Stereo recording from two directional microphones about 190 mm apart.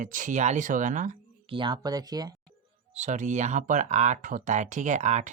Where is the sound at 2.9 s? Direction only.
40° right (ahead or behind).